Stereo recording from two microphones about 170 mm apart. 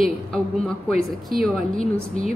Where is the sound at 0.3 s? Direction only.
5° left (ahead or behind).